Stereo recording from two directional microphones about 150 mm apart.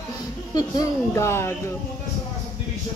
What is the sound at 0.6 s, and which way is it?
Speech, 20° left (ahead or behind).